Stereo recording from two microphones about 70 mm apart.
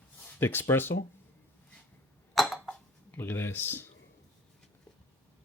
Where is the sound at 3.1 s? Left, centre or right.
Left.